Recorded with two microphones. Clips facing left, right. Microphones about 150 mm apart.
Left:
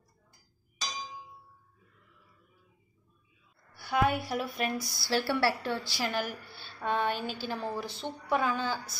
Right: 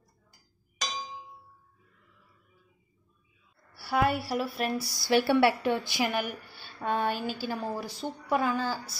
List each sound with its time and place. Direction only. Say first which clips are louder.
3.7 s a woman's voice: right 1 dB; 5° right (ahead or behind)
4.9 s a woman's voice: right 9 dB; 15° right (ahead or behind)